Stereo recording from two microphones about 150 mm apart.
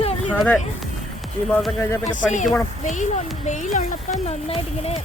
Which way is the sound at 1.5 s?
5° left (ahead or behind).